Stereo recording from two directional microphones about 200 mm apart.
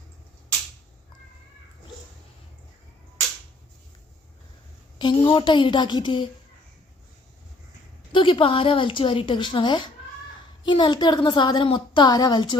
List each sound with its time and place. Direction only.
4.9 s a woman's voice: 25° left (ahead or behind)
8.1 s a woman's voice: 25° left (ahead or behind)